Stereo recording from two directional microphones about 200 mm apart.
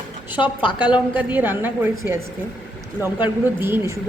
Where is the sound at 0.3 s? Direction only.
25° left (ahead or behind).